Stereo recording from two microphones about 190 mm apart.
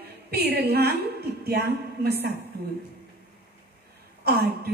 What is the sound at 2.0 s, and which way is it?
Speech, 60° right (ahead or behind).